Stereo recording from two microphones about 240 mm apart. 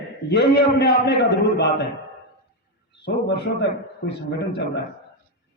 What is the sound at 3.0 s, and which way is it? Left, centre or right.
A man's voice, left.